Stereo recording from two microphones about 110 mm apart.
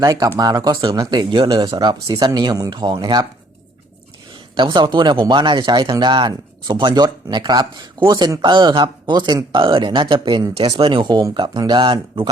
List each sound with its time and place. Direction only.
0.0 s speech: 35° right (ahead or behind)
4.5 s speech: 45° right (ahead or behind)